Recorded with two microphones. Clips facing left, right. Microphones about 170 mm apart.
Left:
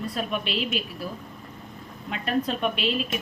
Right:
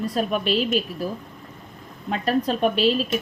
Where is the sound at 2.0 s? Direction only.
40° right (ahead or behind).